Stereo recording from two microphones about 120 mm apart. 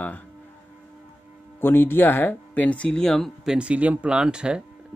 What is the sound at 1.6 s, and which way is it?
Speech, 15° left (ahead or behind).